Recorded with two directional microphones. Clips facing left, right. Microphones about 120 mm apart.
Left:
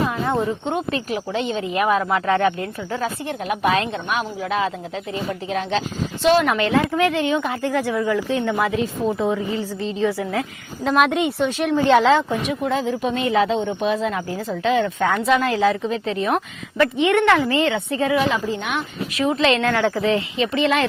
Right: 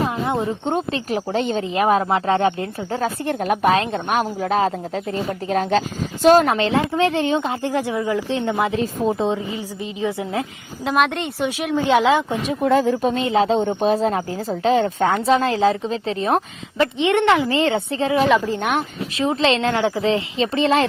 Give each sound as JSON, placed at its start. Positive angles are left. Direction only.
{"t": 0.6, "sound": "a woman's voice", "side_deg": -35}
{"t": 3.0, "sound": "a woman's voice", "side_deg": -45}
{"t": 8.7, "sound": "a woman's voice", "side_deg": -35}
{"t": 9.2, "sound": "speech", "side_deg": -20}
{"t": 10.8, "sound": "a woman's voice", "side_deg": 0}
{"t": 12.6, "sound": "a woman's voice", "side_deg": -55}
{"t": 13.6, "sound": "a woman's voice", "side_deg": -40}
{"t": 17.6, "sound": "a woman's voice", "side_deg": -35}
{"t": 18.5, "sound": "a woman's voice", "side_deg": -45}
{"t": 19.1, "sound": "speech", "side_deg": -30}